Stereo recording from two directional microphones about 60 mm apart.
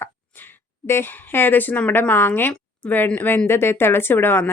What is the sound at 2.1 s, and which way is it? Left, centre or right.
A woman's voice, left.